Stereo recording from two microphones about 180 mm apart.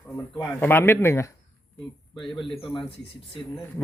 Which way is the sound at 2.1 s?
30° left (ahead or behind).